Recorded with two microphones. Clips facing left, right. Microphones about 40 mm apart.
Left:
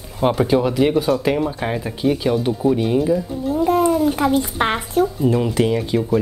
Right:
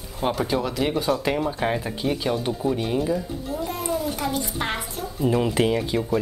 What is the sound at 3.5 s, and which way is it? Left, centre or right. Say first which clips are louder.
Cat: left 12 dB; left.